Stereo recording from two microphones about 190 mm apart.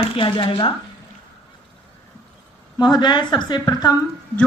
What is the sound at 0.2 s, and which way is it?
Speech, 25° left (ahead or behind).